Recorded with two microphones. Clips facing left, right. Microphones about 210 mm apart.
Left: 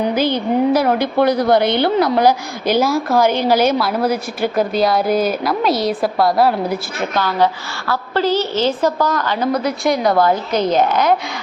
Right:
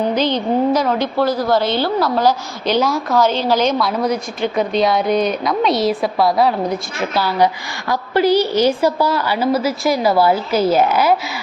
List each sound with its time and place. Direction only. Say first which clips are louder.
0.0 s a woman's voice: even; 10° left (ahead or behind)
1.2 s a woman's voice: left 3 dB; 65° left (ahead or behind)
2.2 s a woman's voice: left 2 dB; 10° left (ahead or behind); by 11.2 s 5° right (ahead or behind)